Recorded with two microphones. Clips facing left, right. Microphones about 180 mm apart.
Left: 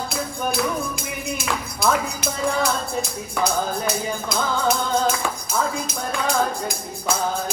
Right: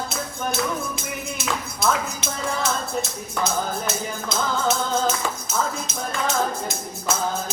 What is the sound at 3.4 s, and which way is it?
Music, centre (ahead or behind).